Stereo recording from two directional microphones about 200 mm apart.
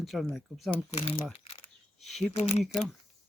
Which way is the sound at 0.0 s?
Centre (ahead or behind).